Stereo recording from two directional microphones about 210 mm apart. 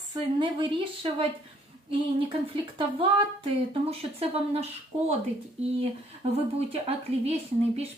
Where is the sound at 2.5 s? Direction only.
25° right (ahead or behind).